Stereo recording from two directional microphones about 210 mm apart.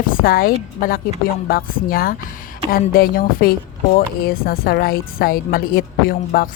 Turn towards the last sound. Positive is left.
turn(degrees=45)  # may be behind; listen again after turning